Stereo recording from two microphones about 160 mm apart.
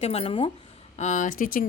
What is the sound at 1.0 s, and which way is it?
Speech, 50° left (ahead or behind).